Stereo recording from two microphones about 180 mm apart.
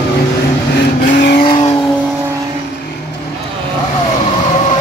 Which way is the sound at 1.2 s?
65° left (ahead or behind).